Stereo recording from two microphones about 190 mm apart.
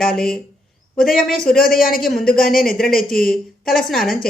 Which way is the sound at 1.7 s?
50° left (ahead or behind).